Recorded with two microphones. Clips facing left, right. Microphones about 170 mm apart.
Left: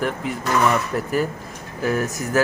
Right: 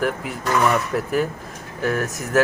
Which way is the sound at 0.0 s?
Centre (ahead or behind).